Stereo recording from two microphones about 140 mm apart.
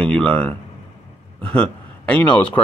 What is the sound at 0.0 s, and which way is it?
Speech, 10° left (ahead or behind).